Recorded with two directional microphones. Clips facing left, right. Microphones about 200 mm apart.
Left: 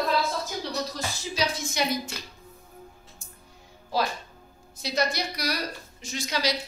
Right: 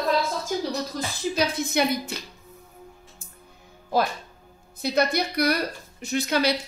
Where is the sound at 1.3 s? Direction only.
60° right (ahead or behind).